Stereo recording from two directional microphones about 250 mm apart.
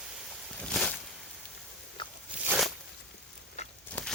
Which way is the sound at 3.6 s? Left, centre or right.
Left.